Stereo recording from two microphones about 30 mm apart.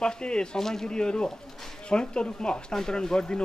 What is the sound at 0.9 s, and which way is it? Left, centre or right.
Speech, left.